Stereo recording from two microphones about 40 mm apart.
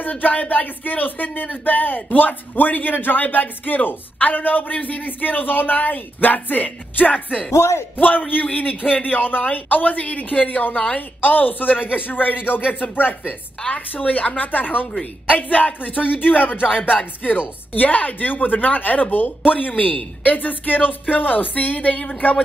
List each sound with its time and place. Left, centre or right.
0.0 s speech: left
10.7 s a woman's voice: left
11.0 s speech: left
13.7 s speech: left